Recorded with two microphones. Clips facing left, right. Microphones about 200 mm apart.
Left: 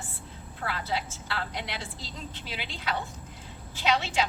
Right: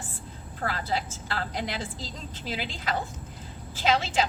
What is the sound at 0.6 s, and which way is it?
A woman's voice, 40° right (ahead or behind).